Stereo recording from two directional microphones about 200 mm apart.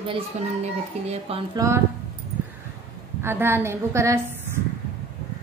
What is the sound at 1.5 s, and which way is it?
Speech, 15° right (ahead or behind).